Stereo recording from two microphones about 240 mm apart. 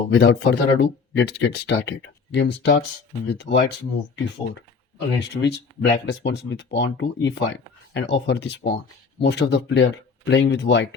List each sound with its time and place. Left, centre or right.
0.1 s speech: left